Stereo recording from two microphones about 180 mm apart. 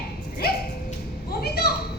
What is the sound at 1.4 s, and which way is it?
Speech, 60° left (ahead or behind).